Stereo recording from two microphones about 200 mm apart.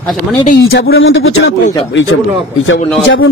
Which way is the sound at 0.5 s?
60° left (ahead or behind).